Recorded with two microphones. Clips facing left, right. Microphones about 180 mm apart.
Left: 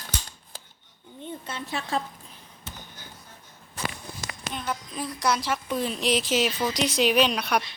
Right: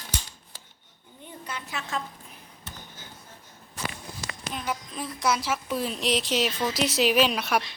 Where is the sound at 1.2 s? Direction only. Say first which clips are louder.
Left 3 dB; 30° left (ahead or behind).